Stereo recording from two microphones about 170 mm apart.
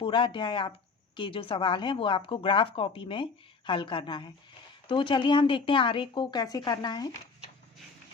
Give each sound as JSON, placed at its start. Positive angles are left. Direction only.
{"t": 0.0, "sound": "speech", "side_deg": 30}